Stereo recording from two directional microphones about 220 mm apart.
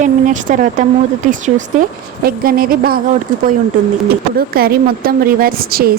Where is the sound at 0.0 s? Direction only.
35° right (ahead or behind).